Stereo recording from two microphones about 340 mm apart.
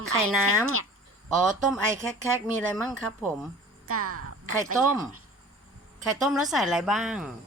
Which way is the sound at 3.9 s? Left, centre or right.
Right.